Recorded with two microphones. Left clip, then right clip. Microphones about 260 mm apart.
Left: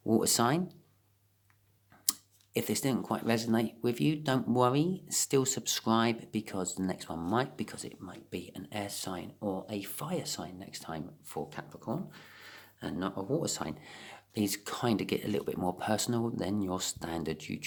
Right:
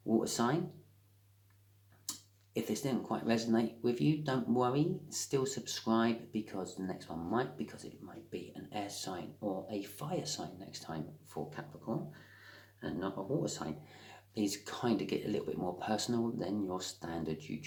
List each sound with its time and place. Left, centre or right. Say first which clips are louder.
0.1 s speech: left 5 dB; left
2.0 s speech: left 10 dB; left